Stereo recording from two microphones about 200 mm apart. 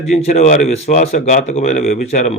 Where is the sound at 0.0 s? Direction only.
30° left (ahead or behind).